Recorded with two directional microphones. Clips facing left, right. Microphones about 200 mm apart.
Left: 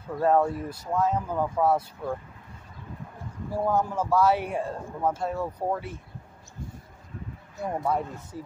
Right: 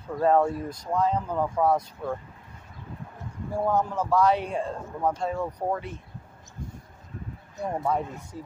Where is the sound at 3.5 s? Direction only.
5° left (ahead or behind).